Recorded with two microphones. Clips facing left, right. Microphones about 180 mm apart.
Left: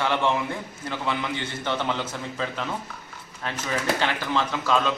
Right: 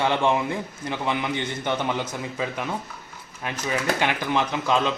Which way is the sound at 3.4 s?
10° right (ahead or behind).